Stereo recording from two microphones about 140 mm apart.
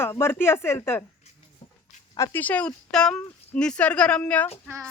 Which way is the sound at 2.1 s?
20° left (ahead or behind).